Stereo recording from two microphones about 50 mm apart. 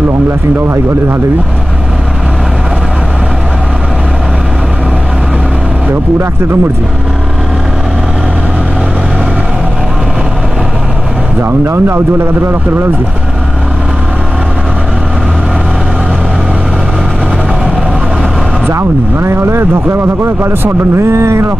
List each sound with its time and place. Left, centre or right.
11.6 s speech: right
18.7 s speech: right